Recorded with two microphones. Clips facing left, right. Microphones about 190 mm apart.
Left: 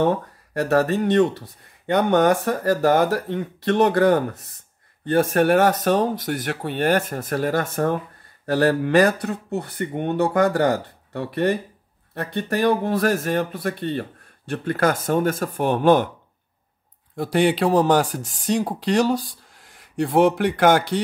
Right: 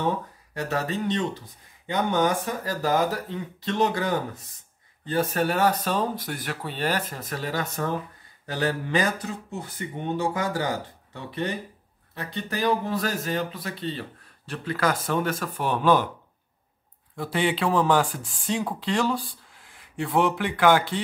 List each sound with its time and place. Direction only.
0.0 s speech: 60° left (ahead or behind)
17.1 s speech: 40° left (ahead or behind)